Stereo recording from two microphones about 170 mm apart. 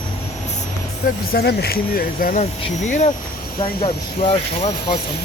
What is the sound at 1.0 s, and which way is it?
Speech, 65° left (ahead or behind).